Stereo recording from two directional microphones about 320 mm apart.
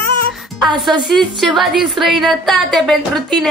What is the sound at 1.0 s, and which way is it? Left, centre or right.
A woman's voice, centre.